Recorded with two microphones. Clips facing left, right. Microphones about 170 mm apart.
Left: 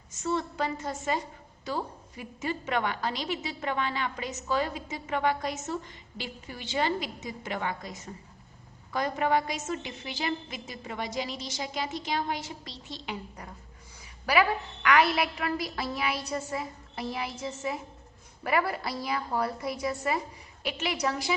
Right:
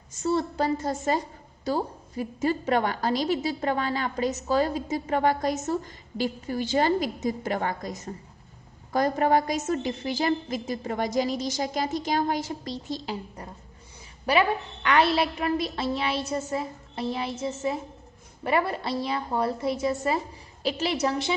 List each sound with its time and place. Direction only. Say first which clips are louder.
0.2 s a woman's voice: right 5 dB; 35° right (ahead or behind)